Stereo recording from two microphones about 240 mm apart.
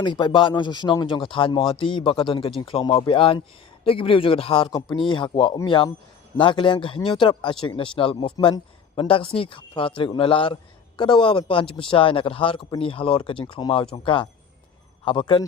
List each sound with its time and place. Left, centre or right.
0.0 s speech: centre